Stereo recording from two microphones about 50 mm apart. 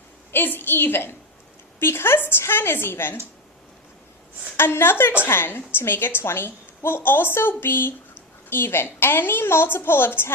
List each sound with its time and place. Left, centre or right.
0.3 s a woman's voice: left
4.5 s a woman's voice: left